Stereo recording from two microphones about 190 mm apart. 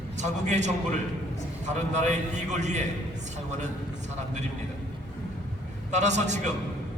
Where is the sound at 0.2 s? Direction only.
40° right (ahead or behind).